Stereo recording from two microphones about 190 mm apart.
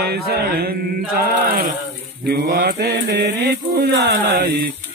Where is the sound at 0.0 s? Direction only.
55° right (ahead or behind).